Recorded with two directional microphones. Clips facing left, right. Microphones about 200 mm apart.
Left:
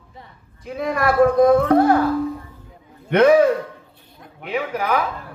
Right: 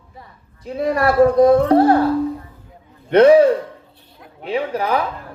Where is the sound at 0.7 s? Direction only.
35° right (ahead or behind).